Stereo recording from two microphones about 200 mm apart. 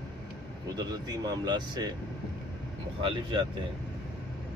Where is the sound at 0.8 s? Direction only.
20° right (ahead or behind).